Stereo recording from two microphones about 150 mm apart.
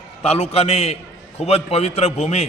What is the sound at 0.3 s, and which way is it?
A man's voice, 40° left (ahead or behind).